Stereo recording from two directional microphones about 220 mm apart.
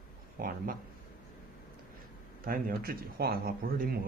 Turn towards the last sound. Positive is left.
turn(degrees=-40)  # may be behind; listen again after turning